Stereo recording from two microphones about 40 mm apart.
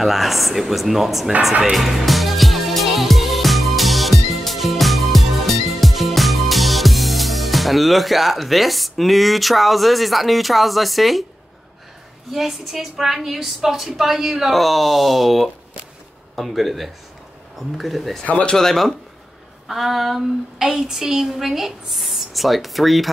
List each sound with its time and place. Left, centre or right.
0.0 s speech: centre
1.6 s music: centre
12.3 s a woman's voice: centre
14.5 s speech: centre
18.2 s speech: left
18.5 s speech: centre
19.7 s a woman's voice: centre